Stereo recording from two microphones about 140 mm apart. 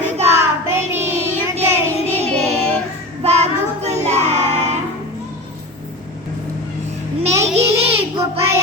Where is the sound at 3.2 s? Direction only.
50° right (ahead or behind).